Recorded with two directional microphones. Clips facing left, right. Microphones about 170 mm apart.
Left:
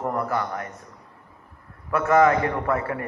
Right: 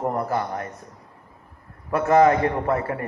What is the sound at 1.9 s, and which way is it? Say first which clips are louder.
A man's voice: right 2 dB; 30° right (ahead or behind).